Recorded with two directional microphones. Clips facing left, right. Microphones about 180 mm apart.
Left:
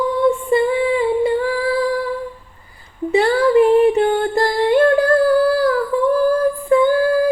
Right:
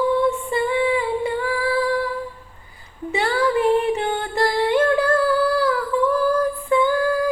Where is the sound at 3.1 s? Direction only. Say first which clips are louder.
Left 8 dB; 35° left (ahead or behind).